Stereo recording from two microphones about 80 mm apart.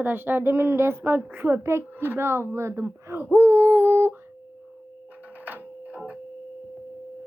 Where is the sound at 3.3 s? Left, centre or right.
Right.